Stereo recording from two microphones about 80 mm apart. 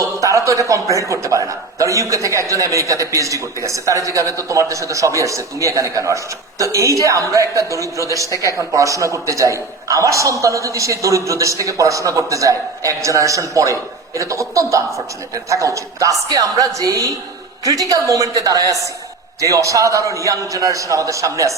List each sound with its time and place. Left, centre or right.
0.0 s a man's voice: right